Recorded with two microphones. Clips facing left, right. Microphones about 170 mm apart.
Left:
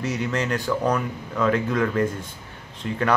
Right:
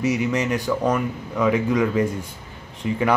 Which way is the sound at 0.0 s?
15° right (ahead or behind).